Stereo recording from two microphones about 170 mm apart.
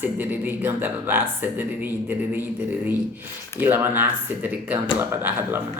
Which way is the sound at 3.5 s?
15° right (ahead or behind).